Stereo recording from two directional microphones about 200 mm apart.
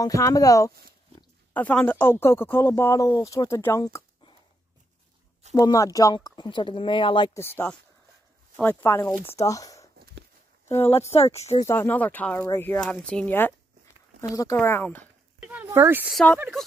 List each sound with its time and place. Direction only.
0.0 s speech: 15° left (ahead or behind)
5.5 s speech: 15° left (ahead or behind)
7.3 s speech: 10° left (ahead or behind)
11.3 s speech: 30° left (ahead or behind)
11.6 s speech: 10° left (ahead or behind)
15.4 s speech: 10° right (ahead or behind)